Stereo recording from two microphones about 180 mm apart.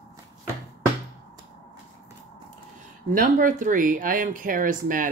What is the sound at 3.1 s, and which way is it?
Speech, 45° right (ahead or behind).